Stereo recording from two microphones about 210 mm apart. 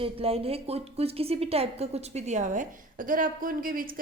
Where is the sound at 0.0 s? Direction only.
25° right (ahead or behind).